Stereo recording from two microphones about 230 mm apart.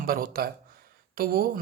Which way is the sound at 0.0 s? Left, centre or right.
Right.